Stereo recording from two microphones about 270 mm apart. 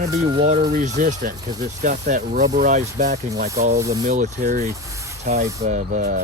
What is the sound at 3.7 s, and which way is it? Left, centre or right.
Speech, centre.